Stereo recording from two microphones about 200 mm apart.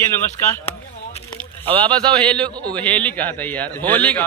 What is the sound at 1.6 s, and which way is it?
Speech, 25° right (ahead or behind).